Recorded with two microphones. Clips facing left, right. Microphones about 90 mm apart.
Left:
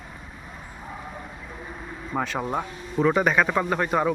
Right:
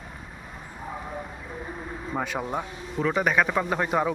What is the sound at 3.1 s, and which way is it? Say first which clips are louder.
Speech: left 2 dB; centre (ahead or behind).